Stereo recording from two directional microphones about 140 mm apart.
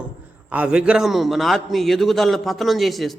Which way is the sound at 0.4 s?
10° right (ahead or behind).